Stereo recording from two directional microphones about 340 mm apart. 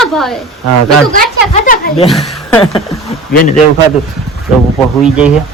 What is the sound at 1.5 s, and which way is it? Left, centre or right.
Speech, centre.